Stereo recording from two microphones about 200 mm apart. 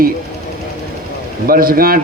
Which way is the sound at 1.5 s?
45° right (ahead or behind).